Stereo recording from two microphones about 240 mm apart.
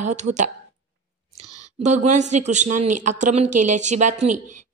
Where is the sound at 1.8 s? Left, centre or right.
Right.